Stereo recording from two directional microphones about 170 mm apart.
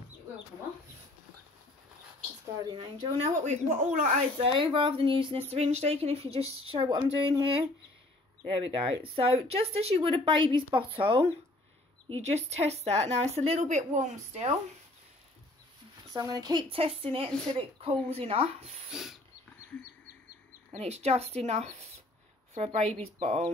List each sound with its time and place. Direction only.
2.6 s speech: 25° right (ahead or behind); by 4.5 s 50° right (ahead or behind)
4.5 s speech: 30° right (ahead or behind)
8.7 s speech: 35° right (ahead or behind)
16.1 s speech: 20° right (ahead or behind)
18.9 s pig: 5° right (ahead or behind)
20.7 s speech: 40° right (ahead or behind)